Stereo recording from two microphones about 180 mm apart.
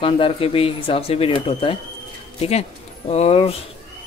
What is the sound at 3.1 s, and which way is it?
Speech, 35° left (ahead or behind).